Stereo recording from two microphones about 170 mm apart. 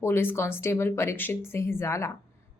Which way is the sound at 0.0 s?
15° left (ahead or behind).